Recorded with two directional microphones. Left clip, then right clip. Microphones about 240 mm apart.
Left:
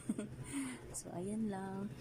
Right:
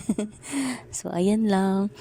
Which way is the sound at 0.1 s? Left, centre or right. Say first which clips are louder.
Right 14 dB; right.